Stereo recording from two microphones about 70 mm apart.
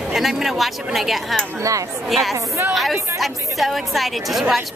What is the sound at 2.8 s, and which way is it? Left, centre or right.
A woman's voice, centre.